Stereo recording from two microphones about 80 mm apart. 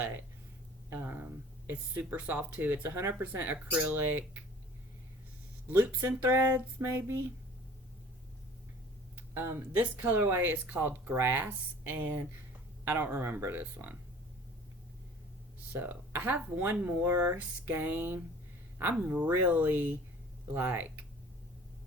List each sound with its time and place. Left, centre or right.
0.9 s speech: right
5.6 s speech: right
9.1 s speech: right
15.7 s speech: right